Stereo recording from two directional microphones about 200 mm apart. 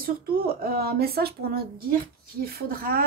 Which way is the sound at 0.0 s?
50° right (ahead or behind).